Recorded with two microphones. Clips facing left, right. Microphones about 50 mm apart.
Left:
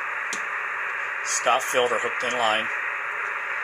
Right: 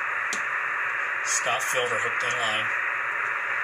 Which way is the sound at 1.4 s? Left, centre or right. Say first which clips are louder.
Left 7 dB; left.